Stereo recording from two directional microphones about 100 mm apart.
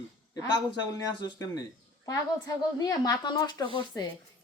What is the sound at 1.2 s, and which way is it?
Speech, 45° left (ahead or behind).